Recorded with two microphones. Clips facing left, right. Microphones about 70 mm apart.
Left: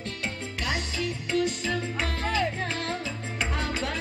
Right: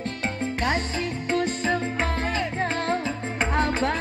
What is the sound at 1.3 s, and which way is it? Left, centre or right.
Music, right.